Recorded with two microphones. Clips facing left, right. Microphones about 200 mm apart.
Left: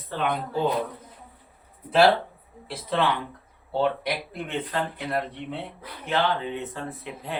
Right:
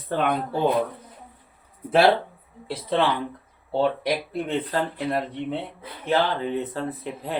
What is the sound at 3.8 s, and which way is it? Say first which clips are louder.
Speech: right 2 dB; 35° right (ahead or behind).